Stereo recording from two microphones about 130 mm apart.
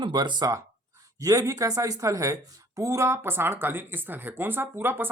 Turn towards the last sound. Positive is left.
turn(degrees=-15)  # may be behind; listen again after turning